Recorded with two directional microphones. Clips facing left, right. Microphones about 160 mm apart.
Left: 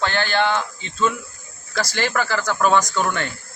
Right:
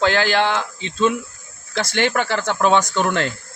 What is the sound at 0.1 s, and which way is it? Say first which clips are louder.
Speech: right 2 dB; 90° right.